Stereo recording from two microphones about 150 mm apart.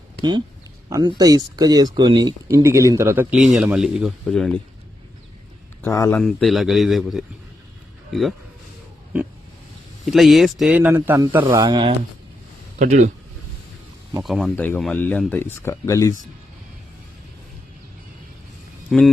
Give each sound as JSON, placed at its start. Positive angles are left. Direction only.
{"t": 0.2, "sound": "speech", "side_deg": -30}
{"t": 5.8, "sound": "speech", "side_deg": 15}
{"t": 6.1, "sound": "speech", "side_deg": 0}
{"t": 10.1, "sound": "speech", "side_deg": 0}
{"t": 11.3, "sound": "speech", "side_deg": -25}
{"t": 12.8, "sound": "speech", "side_deg": -50}
{"t": 14.3, "sound": "speech", "side_deg": 0}
{"t": 14.5, "sound": "speech", "side_deg": 10}
{"t": 18.9, "sound": "speech", "side_deg": 0}